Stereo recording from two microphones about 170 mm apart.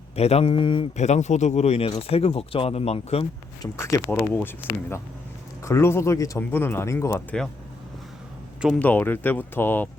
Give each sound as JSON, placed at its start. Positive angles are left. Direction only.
{"t": 0.2, "sound": "speech", "side_deg": 35}
{"t": 0.9, "sound": "speech", "side_deg": 40}
{"t": 3.6, "sound": "speech", "side_deg": 20}
{"t": 8.8, "sound": "speech", "side_deg": 10}